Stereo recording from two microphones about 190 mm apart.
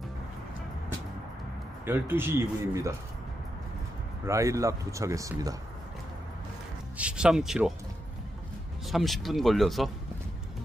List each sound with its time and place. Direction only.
1.9 s speech: 10° right (ahead or behind)
4.3 s speech: 15° right (ahead or behind)
7.0 s speech: 5° right (ahead or behind)
8.8 s speech: centre (ahead or behind)